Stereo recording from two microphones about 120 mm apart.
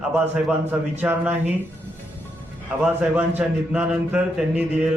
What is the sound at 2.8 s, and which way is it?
Mantra, 10° right (ahead or behind).